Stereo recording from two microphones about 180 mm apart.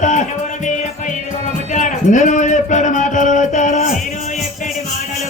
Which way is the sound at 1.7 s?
45° left (ahead or behind).